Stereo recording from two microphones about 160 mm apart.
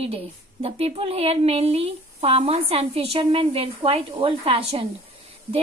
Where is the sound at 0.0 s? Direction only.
40° right (ahead or behind).